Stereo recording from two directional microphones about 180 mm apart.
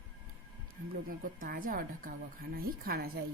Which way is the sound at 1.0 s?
50° right (ahead or behind).